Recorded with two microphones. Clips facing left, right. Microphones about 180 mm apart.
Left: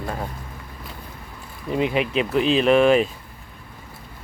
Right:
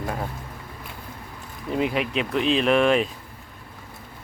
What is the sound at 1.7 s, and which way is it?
Speech, centre (ahead or behind).